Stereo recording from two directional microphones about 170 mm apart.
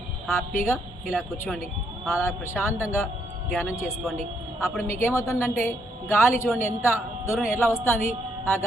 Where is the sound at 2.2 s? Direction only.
15° left (ahead or behind).